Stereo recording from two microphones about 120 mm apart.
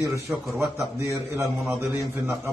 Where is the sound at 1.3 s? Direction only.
25° right (ahead or behind).